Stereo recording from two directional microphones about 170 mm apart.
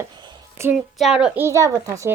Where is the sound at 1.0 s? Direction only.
5° right (ahead or behind); by 2.1 s 20° right (ahead or behind).